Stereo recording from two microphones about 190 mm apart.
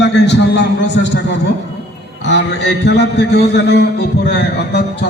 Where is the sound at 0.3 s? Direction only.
65° left (ahead or behind).